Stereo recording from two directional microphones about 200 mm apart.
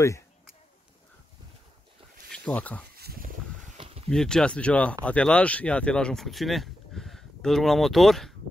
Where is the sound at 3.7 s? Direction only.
30° right (ahead or behind).